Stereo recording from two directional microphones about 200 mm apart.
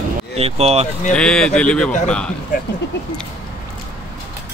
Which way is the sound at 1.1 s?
5° left (ahead or behind).